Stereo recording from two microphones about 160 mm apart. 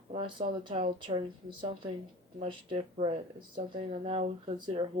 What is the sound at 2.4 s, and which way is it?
Speech, 40° right (ahead or behind).